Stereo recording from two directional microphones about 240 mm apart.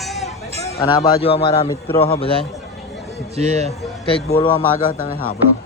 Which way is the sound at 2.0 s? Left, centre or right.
Left.